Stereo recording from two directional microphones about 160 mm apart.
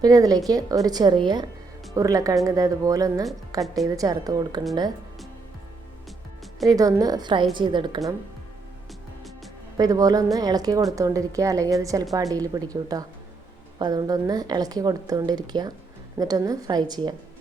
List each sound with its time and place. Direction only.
0.0 s a woman's voice: 25° right (ahead or behind)
6.7 s a woman's voice: 25° right (ahead or behind)
9.7 s a woman's voice: 25° right (ahead or behind)